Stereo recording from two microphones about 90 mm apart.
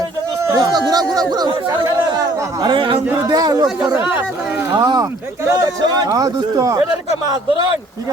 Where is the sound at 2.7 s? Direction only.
70° right (ahead or behind).